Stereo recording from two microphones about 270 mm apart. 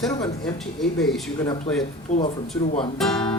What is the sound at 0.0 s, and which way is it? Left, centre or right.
Speech, centre.